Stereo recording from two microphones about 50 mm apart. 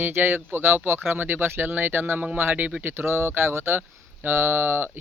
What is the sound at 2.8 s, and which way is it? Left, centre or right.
Speech, right.